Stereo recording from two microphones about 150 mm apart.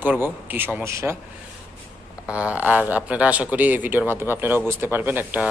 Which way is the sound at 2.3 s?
10° right (ahead or behind).